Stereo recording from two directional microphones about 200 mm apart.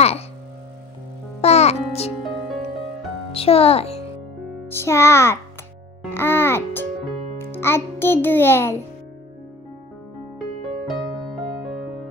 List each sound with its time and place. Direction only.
1.4 s music: 30° left (ahead or behind)
3.3 s speech: 30° left (ahead or behind)
4.6 s a child's voice: 15° left (ahead or behind)